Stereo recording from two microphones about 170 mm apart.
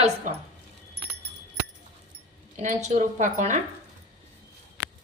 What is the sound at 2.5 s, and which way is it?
A woman's voice, 45° right (ahead or behind).